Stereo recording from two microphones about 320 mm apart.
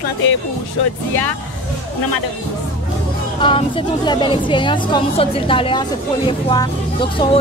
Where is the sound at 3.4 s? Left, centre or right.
Centre.